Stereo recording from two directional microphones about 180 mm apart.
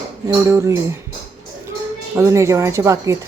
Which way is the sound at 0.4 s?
15° right (ahead or behind).